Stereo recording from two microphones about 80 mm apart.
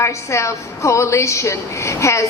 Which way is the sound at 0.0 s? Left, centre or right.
Left.